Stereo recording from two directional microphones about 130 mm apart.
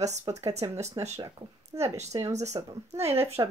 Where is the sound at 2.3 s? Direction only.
60° right (ahead or behind).